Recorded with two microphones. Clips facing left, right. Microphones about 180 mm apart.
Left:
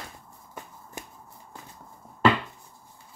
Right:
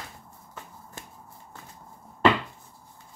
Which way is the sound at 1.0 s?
15° left (ahead or behind).